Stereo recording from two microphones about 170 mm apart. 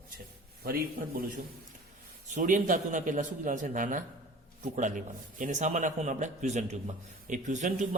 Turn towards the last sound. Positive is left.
turn(degrees=-50)  # may be behind; listen again after turning